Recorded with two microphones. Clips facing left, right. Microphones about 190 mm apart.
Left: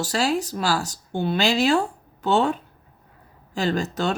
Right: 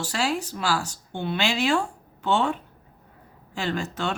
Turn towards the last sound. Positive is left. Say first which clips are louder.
# left 4 dB
turn(degrees=40)  # may be behind; listen again after turning